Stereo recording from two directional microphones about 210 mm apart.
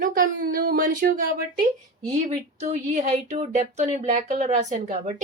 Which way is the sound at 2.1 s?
35° right (ahead or behind).